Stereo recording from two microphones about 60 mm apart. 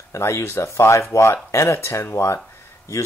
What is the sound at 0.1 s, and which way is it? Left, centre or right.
Speech, left.